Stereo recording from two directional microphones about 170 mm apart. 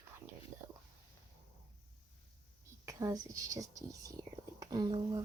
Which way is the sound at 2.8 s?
20° right (ahead or behind).